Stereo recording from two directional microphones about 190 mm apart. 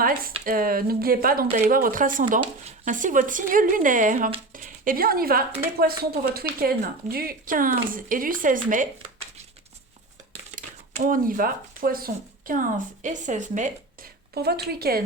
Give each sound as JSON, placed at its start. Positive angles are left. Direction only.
{"t": 0.0, "sound": "a woman's voice", "side_deg": -50}
{"t": 1.5, "sound": "a woman's voice", "side_deg": -40}
{"t": 10.5, "sound": "speech", "side_deg": -45}